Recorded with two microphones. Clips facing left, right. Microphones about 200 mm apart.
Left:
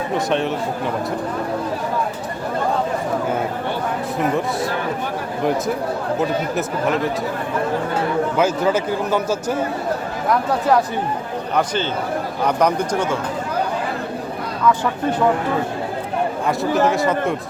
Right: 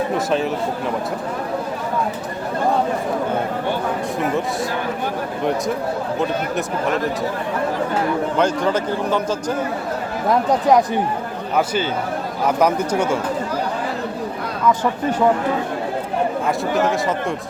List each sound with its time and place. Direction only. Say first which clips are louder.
0.1 s speech: even; centre (ahead or behind)
6.1 s speech: left 2 dB; centre (ahead or behind)
8.4 s a man's voice: left 1 dB; 5° left (ahead or behind)
10.7 s speech: right 2 dB; 15° right (ahead or behind)
16.5 s speech: left 4 dB; centre (ahead or behind)